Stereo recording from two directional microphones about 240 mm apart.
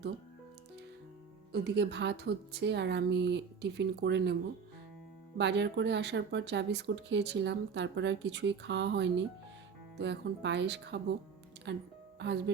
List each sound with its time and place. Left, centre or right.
1.5 s speech: right
5.4 s speech: right